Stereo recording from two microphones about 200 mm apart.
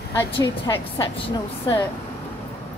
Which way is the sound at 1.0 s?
25° left (ahead or behind).